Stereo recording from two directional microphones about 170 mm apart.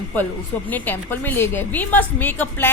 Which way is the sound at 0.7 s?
10° left (ahead or behind).